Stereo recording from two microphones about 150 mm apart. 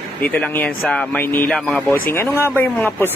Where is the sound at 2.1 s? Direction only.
15° left (ahead or behind).